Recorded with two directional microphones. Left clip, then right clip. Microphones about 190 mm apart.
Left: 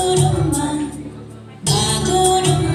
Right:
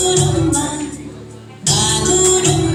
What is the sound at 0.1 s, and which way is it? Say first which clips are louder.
Music: right 2 dB; 45° left (ahead or behind).